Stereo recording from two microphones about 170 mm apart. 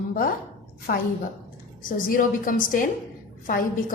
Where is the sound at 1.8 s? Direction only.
55° left (ahead or behind).